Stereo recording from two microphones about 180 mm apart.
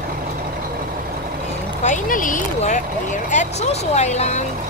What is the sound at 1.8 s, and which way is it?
Speech, 45° left (ahead or behind).